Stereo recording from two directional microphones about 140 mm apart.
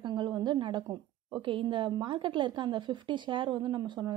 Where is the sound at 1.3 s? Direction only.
40° right (ahead or behind).